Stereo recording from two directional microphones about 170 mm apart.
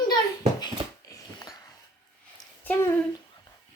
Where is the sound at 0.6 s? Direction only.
20° left (ahead or behind).